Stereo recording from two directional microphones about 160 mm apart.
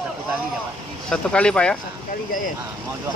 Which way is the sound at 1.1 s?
5° left (ahead or behind).